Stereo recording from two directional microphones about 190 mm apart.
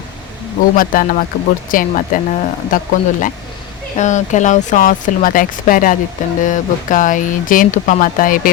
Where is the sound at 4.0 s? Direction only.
40° left (ahead or behind).